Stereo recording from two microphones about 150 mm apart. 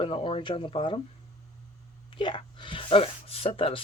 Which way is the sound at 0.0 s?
35° left (ahead or behind).